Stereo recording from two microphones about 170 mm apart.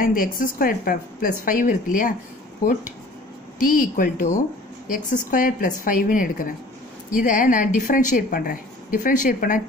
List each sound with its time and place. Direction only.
0.0 s a woman's voice: 55° left (ahead or behind)
3.5 s a woman's voice: 55° left (ahead or behind)